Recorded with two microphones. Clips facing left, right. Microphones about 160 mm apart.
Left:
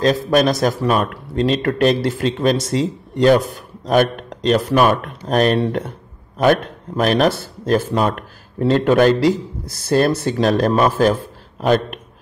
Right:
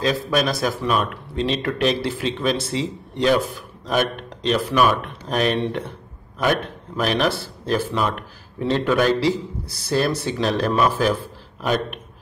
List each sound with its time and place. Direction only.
0.0 s a man's voice: 45° left (ahead or behind)